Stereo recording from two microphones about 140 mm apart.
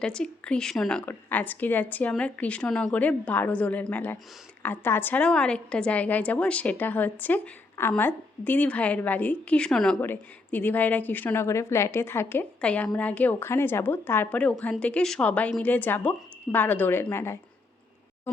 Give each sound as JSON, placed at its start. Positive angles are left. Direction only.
{"t": 0.0, "sound": "a woman's voice", "side_deg": 5}